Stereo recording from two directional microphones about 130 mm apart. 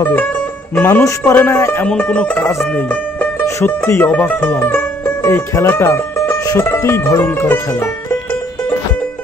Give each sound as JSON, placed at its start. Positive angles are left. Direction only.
{"t": 0.8, "sound": "speech", "side_deg": 20}
{"t": 1.9, "sound": "speech", "side_deg": 10}
{"t": 6.3, "sound": "music", "side_deg": 30}
{"t": 6.6, "sound": "speech", "side_deg": 20}